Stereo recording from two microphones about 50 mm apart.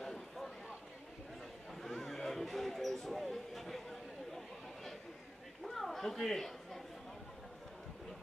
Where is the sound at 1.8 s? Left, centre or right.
Centre.